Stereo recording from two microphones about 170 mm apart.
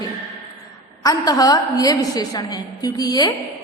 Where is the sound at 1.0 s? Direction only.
20° left (ahead or behind).